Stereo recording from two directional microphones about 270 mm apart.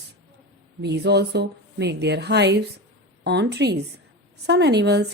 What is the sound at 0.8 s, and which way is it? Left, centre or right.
A woman's voice, right.